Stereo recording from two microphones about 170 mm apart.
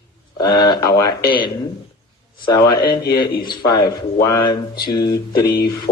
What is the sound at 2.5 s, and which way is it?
Speech, 20° left (ahead or behind).